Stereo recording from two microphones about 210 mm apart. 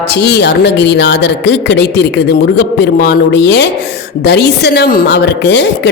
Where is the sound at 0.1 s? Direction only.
55° left (ahead or behind).